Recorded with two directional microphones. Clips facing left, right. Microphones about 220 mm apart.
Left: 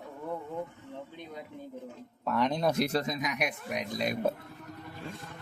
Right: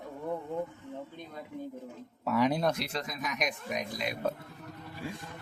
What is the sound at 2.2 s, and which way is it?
Speech, 5° right (ahead or behind).